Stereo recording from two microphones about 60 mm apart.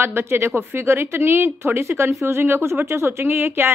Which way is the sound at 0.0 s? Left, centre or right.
Right.